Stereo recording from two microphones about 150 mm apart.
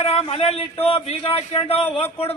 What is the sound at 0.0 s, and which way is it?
A man's voice, 45° left (ahead or behind).